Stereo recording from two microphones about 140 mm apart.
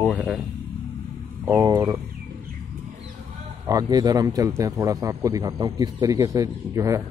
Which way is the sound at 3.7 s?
25° right (ahead or behind).